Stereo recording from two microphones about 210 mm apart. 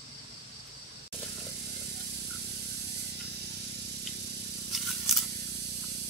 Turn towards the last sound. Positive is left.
turn(degrees=0)  # may be behind; listen again after turning